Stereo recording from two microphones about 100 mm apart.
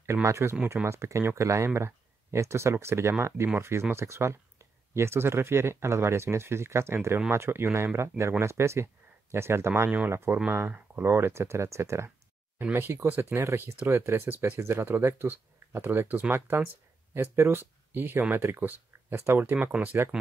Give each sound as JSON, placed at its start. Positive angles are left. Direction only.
{"t": 0.0, "sound": "speech", "side_deg": -30}
{"t": 9.8, "sound": "speech", "side_deg": -15}
{"t": 10.1, "sound": "speech", "side_deg": -25}